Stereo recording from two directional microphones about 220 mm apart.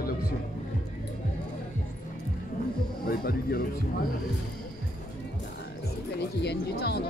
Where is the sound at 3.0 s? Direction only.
45° left (ahead or behind).